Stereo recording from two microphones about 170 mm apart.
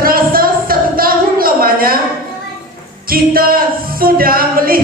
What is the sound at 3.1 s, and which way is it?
Music, 60° right (ahead or behind).